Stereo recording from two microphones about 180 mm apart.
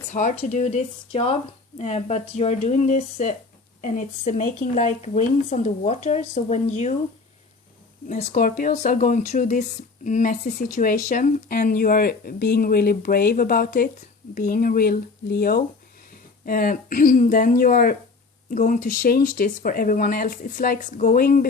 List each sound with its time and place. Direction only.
0.1 s a woman's voice: 45° left (ahead or behind)
8.0 s speech: 40° left (ahead or behind)